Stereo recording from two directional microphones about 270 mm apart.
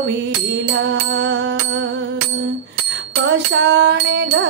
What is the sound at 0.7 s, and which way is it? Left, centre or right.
Music, right.